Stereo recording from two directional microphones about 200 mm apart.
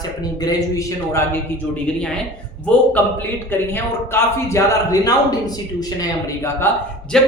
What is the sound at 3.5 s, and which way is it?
A man's voice, 10° left (ahead or behind).